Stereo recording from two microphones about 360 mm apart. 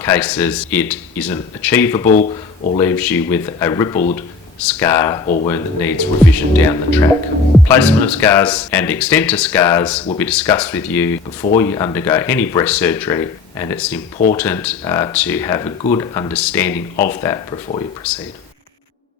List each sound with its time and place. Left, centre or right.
0.0 s speech: centre
2.0 s speech: left
2.7 s speech: centre